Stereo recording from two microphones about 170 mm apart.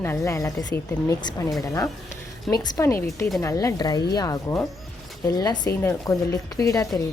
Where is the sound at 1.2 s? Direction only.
25° left (ahead or behind).